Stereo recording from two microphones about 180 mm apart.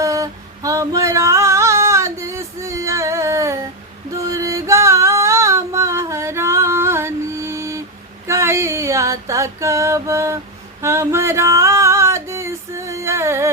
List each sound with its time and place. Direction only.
0.0 s female singing: 20° right (ahead or behind)
4.3 s singing: 15° right (ahead or behind)
8.3 s a sound: 15° right (ahead or behind)